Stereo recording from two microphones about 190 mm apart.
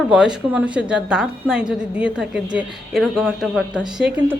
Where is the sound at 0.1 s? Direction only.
5° right (ahead or behind).